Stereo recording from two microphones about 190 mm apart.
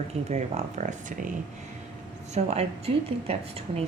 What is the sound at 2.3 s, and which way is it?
Speech, 35° right (ahead or behind).